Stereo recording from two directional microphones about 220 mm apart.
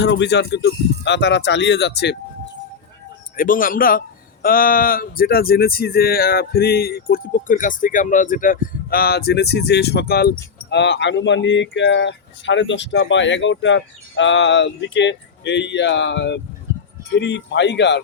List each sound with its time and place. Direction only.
0.0 s speech: 50° left (ahead or behind)
3.3 s speech: 40° left (ahead or behind)